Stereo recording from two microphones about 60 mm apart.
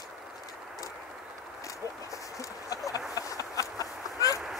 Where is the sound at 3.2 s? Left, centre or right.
Left.